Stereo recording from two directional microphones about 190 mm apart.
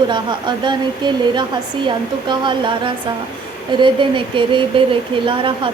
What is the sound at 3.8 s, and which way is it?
Speech, 25° right (ahead or behind).